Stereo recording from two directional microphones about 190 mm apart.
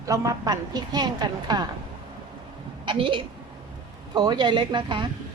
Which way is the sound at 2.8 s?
25° right (ahead or behind).